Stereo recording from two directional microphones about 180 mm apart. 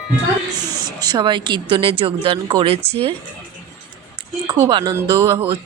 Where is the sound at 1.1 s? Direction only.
25° right (ahead or behind).